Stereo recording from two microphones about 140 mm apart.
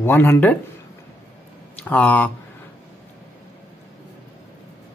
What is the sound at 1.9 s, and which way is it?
Speech, 10° left (ahead or behind).